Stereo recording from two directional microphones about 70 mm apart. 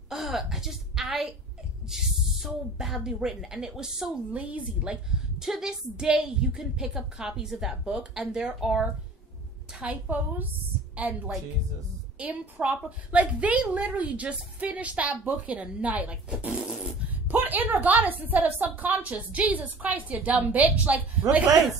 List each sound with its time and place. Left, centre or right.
0.1 s a sound: centre
1.9 s speech: centre
4.3 s a woman's voice: right
5.1 s a woman's voice: centre
9.7 s a woman's voice: centre
16.4 s a sound: centre
17.1 s a woman's voice: right